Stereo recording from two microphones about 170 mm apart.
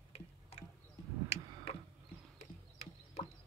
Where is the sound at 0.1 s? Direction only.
35° left (ahead or behind).